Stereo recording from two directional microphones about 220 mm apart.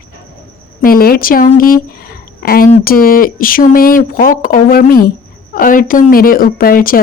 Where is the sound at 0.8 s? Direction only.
40° left (ahead or behind).